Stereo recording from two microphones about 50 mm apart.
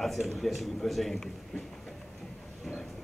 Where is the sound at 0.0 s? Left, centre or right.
Centre.